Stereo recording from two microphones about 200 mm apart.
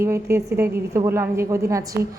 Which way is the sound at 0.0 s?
15° right (ahead or behind).